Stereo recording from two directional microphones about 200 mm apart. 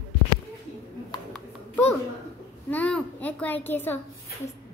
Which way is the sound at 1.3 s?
5° left (ahead or behind).